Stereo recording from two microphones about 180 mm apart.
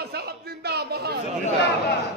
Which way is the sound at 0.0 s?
60° right (ahead or behind).